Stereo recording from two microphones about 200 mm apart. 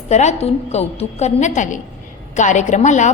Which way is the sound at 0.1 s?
35° left (ahead or behind).